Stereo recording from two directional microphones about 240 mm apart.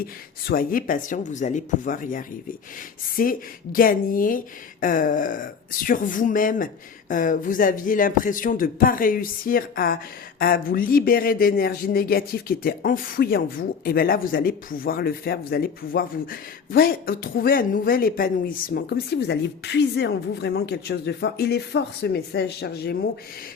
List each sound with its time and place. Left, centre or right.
0.0 s speech: left